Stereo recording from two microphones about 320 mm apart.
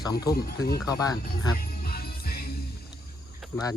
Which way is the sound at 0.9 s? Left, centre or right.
Centre.